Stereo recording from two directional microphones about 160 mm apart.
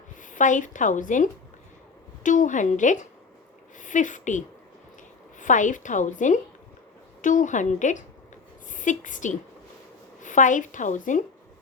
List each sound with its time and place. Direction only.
0.2 s a woman's voice: 55° left (ahead or behind)